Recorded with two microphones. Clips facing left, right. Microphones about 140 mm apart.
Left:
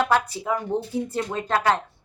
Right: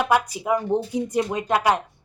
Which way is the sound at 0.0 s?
10° right (ahead or behind).